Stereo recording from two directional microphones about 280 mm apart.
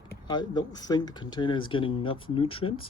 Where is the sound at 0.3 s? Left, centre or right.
Centre.